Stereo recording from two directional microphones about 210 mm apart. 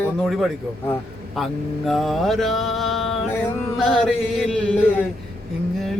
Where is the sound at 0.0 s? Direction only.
Centre (ahead or behind).